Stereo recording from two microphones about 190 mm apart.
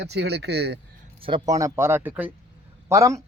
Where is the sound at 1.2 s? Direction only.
25° right (ahead or behind).